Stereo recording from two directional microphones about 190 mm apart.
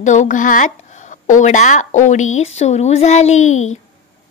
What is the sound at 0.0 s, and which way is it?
Speech, 40° left (ahead or behind).